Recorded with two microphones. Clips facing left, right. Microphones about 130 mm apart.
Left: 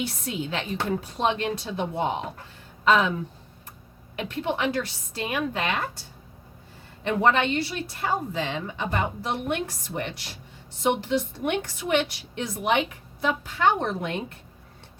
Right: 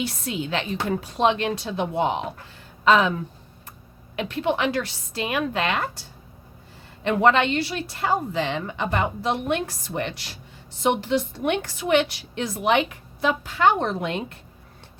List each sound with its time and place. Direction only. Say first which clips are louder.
0.0 s a woman's voice: right 2 dB; 90° right